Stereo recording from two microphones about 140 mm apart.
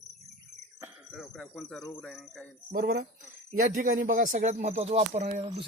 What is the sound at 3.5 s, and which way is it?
Speech, 70° right (ahead or behind).